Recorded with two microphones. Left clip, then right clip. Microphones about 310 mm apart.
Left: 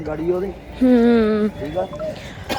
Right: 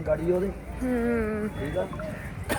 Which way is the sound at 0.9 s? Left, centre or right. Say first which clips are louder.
Left 12 dB; left.